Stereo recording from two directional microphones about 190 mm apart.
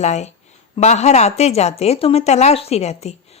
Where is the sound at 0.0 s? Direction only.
35° left (ahead or behind).